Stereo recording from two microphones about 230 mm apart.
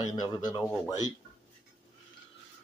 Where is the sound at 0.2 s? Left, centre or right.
Centre.